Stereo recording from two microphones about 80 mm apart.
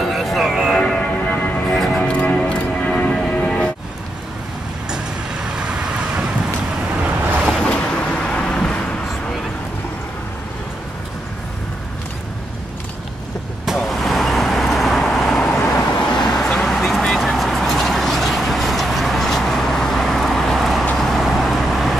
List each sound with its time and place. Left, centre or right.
0.0 s music: centre
0.7 s music: centre
1.3 s music: left
1.7 s music: centre
4.8 s vehicle: centre
7.4 s a sound: centre
13.7 s vehicle: centre